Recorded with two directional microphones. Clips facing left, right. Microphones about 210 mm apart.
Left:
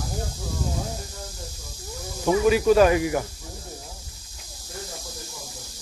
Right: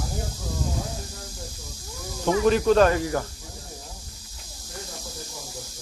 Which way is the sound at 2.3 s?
10° left (ahead or behind).